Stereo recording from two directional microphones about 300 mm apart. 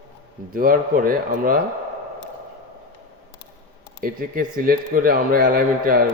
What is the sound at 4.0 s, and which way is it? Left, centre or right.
A man's voice, right.